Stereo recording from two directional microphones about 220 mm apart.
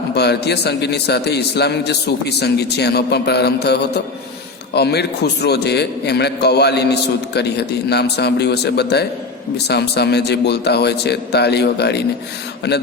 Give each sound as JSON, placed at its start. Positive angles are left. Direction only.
{"t": 0.1, "sound": "a man's voice", "side_deg": 50}